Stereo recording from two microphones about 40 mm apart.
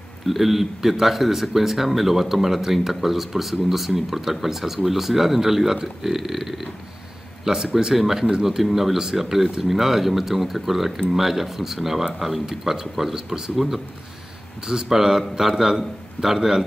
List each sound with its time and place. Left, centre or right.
0.3 s speech: centre
7.4 s speech: centre
7.7 s speech: centre